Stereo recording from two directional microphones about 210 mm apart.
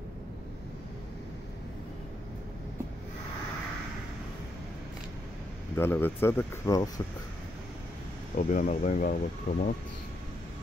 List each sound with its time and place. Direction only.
5.8 s speech: 10° left (ahead or behind)
8.4 s speech: 35° left (ahead or behind)